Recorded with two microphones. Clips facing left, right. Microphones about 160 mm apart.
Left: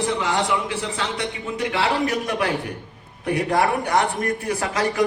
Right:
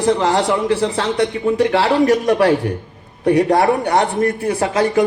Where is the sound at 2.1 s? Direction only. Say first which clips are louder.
Right 10 dB; 40° right (ahead or behind).